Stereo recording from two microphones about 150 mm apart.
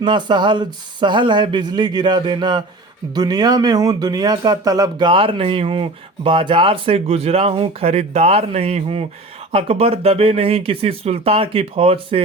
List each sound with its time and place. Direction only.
0.0 s speech: 30° right (ahead or behind)